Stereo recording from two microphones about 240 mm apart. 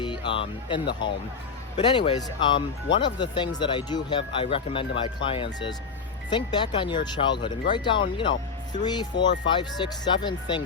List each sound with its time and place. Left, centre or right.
0.3 s speech: centre